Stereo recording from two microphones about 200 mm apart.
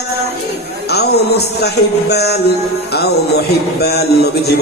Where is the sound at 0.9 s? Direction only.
55° left (ahead or behind).